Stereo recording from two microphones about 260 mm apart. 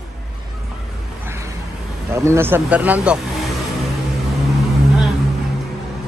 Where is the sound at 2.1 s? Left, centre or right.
Centre.